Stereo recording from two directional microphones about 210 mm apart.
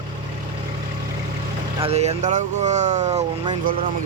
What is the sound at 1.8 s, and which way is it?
Speech, 30° right (ahead or behind).